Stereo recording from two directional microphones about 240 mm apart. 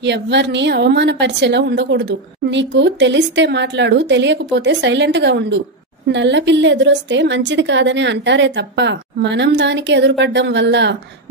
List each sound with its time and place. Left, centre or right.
0.0 s a woman's voice: right